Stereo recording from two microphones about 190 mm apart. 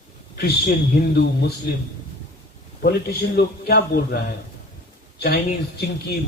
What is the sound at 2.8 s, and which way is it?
A man's voice, 55° left (ahead or behind).